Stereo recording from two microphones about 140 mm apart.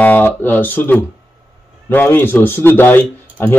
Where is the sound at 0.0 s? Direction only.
10° left (ahead or behind).